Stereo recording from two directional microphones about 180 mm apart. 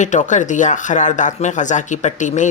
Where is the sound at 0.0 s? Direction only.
45° left (ahead or behind).